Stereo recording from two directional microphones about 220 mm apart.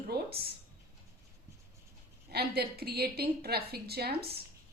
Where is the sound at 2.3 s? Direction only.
45° right (ahead or behind).